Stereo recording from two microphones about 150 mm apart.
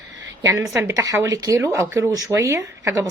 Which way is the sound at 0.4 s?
20° right (ahead or behind).